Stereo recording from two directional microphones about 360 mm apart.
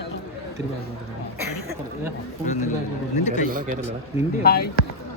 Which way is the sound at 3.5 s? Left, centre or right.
Right.